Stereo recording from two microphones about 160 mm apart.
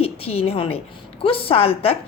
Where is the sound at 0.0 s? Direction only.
40° left (ahead or behind).